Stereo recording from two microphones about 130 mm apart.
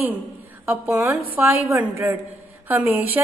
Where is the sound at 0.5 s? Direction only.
15° right (ahead or behind).